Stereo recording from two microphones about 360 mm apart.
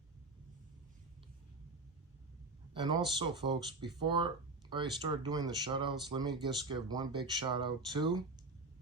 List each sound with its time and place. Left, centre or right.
2.7 s speech: centre